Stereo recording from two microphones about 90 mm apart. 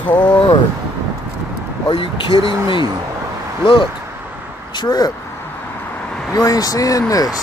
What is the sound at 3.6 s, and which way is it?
Speech, 60° left (ahead or behind).